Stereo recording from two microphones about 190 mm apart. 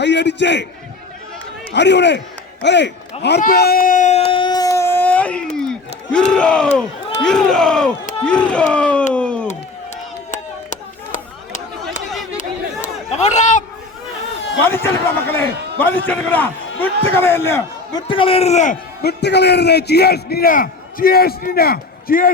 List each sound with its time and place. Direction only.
0.0 s a man's voice: 65° left (ahead or behind)
1.7 s a man's voice: 65° left (ahead or behind)
3.4 s a sound: 55° left (ahead or behind); by 6.7 s 5° left (ahead or behind)
7.2 s a man's voice: 5° left (ahead or behind)
9.1 s a sound: 5° left (ahead or behind)
10.3 s a sound: 40° left (ahead or behind)
12.4 s chatter: 40° left (ahead or behind)
14.7 s a man's voice: 10° left (ahead or behind)
18.1 s speech: 30° left (ahead or behind)
19.0 s a man's voice: 60° left (ahead or behind)